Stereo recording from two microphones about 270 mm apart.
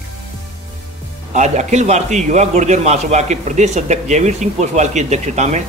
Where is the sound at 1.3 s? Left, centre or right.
Right.